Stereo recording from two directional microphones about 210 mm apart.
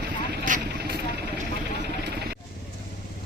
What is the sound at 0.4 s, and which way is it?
Vehicle, 35° right (ahead or behind).